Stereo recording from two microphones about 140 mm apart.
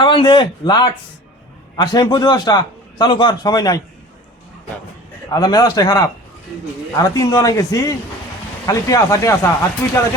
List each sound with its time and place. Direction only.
0.0 s a man's voice: 35° left (ahead or behind)
5.3 s a man's voice: 30° left (ahead or behind)